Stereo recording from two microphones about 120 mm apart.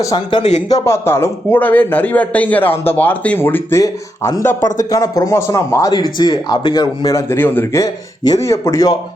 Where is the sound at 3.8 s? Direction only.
25° left (ahead or behind).